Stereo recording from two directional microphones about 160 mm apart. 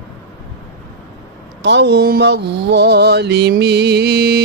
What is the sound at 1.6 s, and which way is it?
Mantra, 90° right.